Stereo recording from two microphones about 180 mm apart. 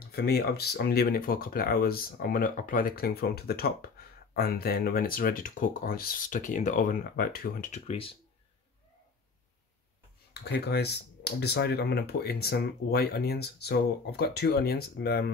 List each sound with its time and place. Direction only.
0.1 s speech: 60° left (ahead or behind)
7.7 s speech: 35° left (ahead or behind)
10.3 s speech: 65° left (ahead or behind)